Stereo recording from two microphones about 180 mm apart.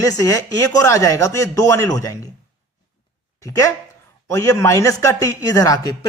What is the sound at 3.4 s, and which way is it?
A man's voice, 20° left (ahead or behind).